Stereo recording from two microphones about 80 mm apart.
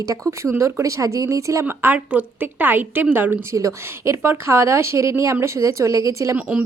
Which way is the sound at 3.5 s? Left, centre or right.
Right.